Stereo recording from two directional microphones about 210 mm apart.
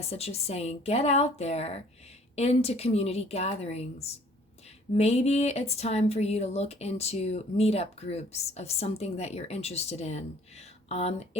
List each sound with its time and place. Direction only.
0.0 s a woman's voice: 30° left (ahead or behind)